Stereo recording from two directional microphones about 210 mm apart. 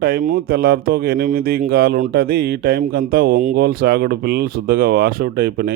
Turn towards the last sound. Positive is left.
turn(degrees=-45)  # may be behind; listen again after turning